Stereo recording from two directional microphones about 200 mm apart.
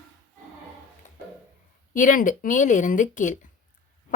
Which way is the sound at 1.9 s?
40° left (ahead or behind).